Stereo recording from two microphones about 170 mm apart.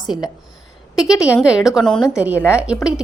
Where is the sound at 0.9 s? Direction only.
Centre (ahead or behind).